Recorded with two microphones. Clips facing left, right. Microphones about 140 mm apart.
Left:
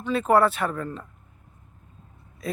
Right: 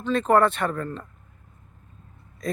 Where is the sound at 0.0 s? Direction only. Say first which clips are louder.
Right 1 dB; 10° left (ahead or behind).